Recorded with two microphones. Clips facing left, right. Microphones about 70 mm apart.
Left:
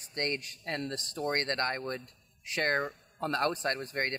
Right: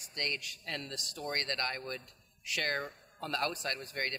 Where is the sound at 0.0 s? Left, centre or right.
Left.